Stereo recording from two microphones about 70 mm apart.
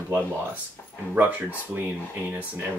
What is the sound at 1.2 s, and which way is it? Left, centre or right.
Speech, right.